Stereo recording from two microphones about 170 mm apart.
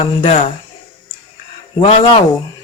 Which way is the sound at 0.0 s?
40° left (ahead or behind).